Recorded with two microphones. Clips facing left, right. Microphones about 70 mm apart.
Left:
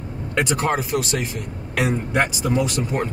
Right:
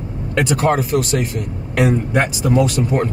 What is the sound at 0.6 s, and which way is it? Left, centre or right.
Speech, centre.